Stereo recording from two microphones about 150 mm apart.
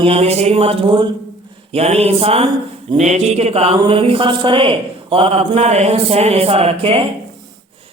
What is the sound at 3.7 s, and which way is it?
Speech, 35° right (ahead or behind).